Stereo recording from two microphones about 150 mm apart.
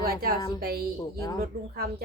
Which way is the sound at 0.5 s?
90° right.